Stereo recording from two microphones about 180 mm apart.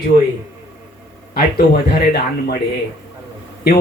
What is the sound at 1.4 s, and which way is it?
Speech, 60° left (ahead or behind).